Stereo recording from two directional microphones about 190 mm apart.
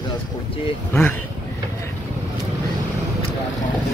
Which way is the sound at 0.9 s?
10° left (ahead or behind).